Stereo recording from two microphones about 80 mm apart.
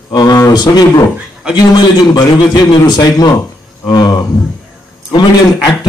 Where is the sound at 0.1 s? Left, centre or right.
Left.